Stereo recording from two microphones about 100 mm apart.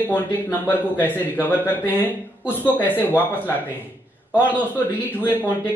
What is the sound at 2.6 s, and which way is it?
Speech, 20° left (ahead or behind).